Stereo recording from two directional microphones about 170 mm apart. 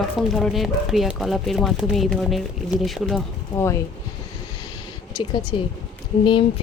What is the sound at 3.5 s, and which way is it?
Speech, 15° left (ahead or behind).